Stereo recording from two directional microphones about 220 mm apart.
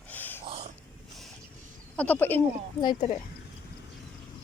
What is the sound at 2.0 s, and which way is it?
Speech, 10° left (ahead or behind).